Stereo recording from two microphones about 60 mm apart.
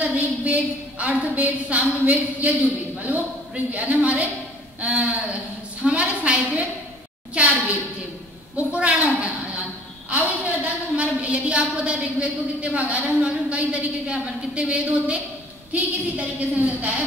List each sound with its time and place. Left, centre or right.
0.0 s a woman's voice: right
5.8 s a sound: right
8.5 s a woman's voice: right